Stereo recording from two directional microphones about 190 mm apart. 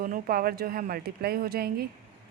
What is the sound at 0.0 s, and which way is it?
Speech, 50° right (ahead or behind).